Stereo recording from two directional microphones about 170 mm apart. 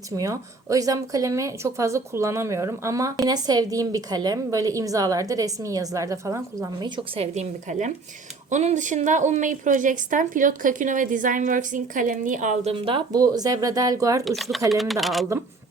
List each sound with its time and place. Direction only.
0.2 s speech: 20° right (ahead or behind)
7.3 s a woman's voice: 45° right (ahead or behind)
12.7 s speech: 30° right (ahead or behind)
14.3 s speech: centre (ahead or behind)